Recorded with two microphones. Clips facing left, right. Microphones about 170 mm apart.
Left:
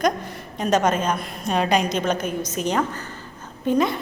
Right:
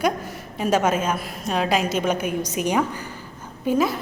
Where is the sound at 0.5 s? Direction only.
5° right (ahead or behind).